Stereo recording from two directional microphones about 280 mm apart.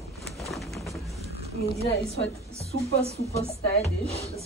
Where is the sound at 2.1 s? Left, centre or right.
Left.